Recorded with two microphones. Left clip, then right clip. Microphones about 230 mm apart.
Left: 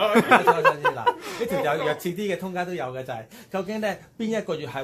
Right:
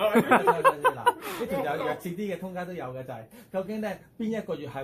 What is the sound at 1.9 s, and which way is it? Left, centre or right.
Speech, left.